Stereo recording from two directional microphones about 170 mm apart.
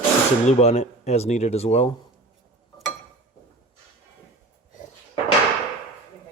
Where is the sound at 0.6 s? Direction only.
40° left (ahead or behind).